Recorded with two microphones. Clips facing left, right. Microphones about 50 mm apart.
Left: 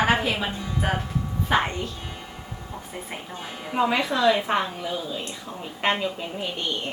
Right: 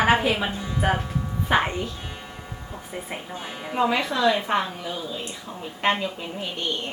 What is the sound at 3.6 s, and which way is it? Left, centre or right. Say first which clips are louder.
A woman's voice: even; centre.